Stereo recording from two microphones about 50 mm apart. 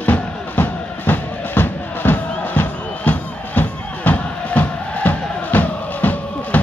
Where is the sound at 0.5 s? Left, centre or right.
Left.